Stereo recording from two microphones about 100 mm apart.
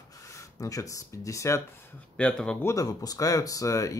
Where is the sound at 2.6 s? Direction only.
35° left (ahead or behind).